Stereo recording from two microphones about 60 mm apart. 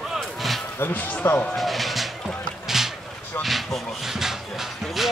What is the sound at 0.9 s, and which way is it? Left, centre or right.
Speech, left.